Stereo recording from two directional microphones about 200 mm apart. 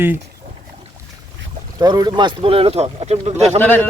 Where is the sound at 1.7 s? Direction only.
20° right (ahead or behind).